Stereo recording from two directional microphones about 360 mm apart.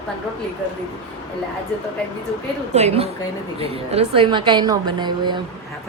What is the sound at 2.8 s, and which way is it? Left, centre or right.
A woman's voice, centre.